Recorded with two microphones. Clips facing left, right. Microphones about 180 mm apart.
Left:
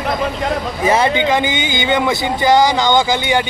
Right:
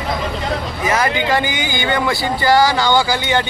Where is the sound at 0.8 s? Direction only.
30° left (ahead or behind).